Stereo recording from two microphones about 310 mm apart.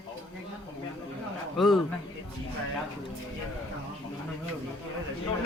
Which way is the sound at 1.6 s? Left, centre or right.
Centre.